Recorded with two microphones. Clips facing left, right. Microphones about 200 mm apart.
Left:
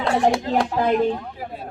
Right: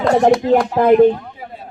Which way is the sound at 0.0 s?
40° right (ahead or behind).